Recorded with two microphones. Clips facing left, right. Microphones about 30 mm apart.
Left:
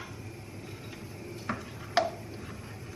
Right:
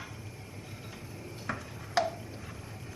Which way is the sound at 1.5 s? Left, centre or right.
Centre.